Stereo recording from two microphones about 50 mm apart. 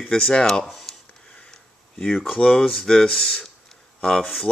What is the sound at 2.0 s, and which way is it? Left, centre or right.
Speech, centre.